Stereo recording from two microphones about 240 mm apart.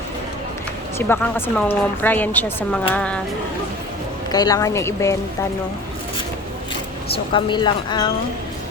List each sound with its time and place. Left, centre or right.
0.9 s speech: centre
4.3 s speech: centre
7.3 s speech: centre